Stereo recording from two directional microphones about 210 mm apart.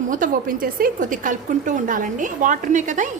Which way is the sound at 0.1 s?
40° right (ahead or behind).